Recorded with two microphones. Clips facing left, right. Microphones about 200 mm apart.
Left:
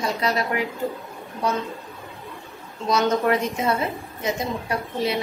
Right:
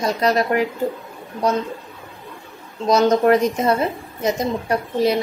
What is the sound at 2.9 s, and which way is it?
A woman's voice, 40° right (ahead or behind).